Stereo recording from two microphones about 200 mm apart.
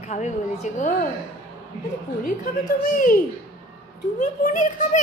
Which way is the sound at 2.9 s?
45° left (ahead or behind).